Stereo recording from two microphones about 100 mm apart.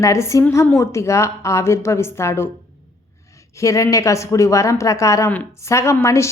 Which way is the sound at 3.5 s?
30° left (ahead or behind).